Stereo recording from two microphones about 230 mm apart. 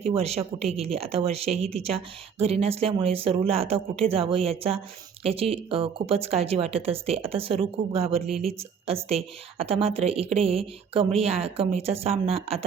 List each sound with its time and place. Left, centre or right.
0.0 s a woman's voice: right